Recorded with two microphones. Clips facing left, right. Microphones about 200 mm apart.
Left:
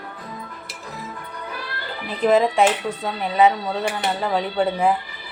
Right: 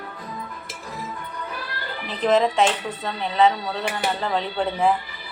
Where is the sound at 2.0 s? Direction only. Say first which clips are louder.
Left 2 dB; 5° left (ahead or behind).